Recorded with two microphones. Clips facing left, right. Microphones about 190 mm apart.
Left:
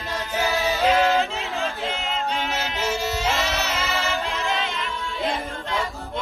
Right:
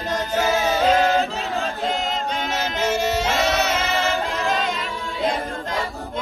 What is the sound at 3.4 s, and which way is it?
Music, 40° right (ahead or behind).